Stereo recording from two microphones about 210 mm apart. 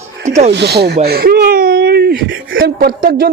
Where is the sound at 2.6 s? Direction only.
45° right (ahead or behind).